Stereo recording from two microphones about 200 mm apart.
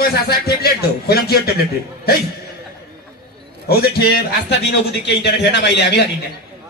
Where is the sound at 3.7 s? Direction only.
50° left (ahead or behind).